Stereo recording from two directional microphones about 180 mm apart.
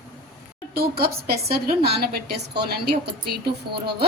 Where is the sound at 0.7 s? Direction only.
60° right (ahead or behind).